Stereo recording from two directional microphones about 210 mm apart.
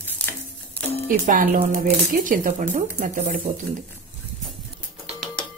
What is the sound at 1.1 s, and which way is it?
Speech, 45° right (ahead or behind).